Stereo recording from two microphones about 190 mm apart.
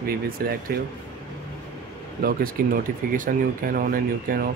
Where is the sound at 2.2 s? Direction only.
50° right (ahead or behind).